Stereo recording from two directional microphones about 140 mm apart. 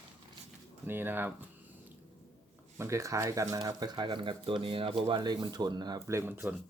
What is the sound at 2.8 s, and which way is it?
Speech, 20° right (ahead or behind).